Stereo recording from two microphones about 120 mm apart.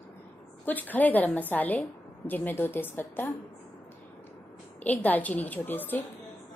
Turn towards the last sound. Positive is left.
turn(degrees=15)  # may be behind; listen again after turning